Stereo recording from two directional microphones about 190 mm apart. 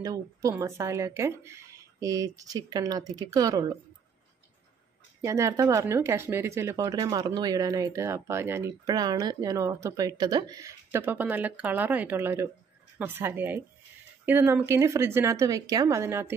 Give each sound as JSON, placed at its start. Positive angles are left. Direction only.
{"t": 0.0, "sound": "speech", "side_deg": -20}
{"t": 5.2, "sound": "speech", "side_deg": -15}